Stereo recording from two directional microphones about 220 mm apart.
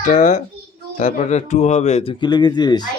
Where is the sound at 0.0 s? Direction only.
35° left (ahead or behind).